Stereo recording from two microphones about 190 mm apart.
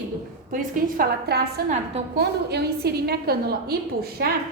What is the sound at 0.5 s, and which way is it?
A woman's voice, 50° right (ahead or behind).